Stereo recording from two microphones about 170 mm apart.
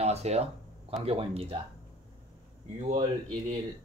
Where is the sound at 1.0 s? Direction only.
35° right (ahead or behind).